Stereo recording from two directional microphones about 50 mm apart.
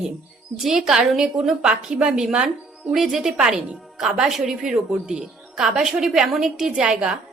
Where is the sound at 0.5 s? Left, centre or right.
Centre.